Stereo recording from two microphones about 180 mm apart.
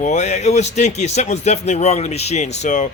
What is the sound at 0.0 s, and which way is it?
Speech, 40° left (ahead or behind).